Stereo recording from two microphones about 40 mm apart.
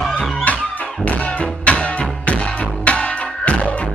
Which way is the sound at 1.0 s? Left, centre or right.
Left.